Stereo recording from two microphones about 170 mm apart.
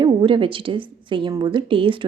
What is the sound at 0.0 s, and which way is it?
A woman's voice, 30° right (ahead or behind).